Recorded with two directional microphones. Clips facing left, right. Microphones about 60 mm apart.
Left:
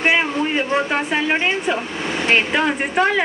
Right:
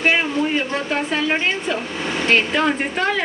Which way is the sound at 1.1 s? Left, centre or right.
Left.